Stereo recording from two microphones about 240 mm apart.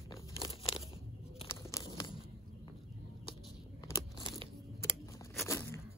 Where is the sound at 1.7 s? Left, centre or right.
Centre.